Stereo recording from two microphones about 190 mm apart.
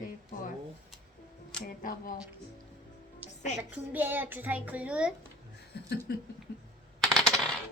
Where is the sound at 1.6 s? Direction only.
45° left (ahead or behind).